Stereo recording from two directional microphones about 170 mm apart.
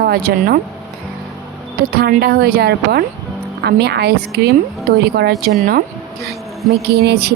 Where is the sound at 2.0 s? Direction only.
65° right (ahead or behind).